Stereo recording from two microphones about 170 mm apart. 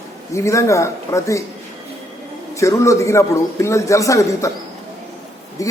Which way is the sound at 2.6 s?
20° left (ahead or behind).